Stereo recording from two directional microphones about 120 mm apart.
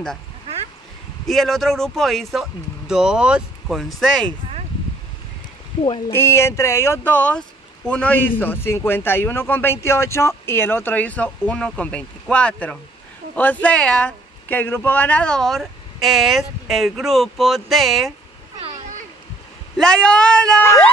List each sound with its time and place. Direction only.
1.2 s speech: centre (ahead or behind)
6.0 s speech: 20° left (ahead or behind); by 18.1 s centre (ahead or behind)
19.8 s speech: 5° left (ahead or behind)